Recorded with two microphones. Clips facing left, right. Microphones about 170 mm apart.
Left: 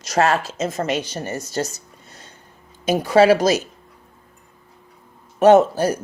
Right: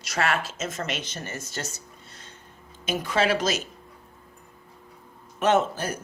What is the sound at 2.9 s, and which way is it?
Speech, 40° left (ahead or behind).